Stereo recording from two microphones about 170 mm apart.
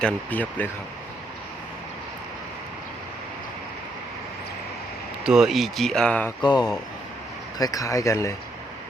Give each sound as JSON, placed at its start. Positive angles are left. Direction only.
{"t": 0.0, "sound": "speech", "side_deg": 10}
{"t": 5.2, "sound": "speech", "side_deg": -5}
{"t": 6.4, "sound": "speech", "side_deg": 25}